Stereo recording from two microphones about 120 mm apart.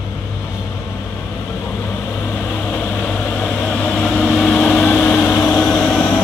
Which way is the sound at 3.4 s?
5° left (ahead or behind).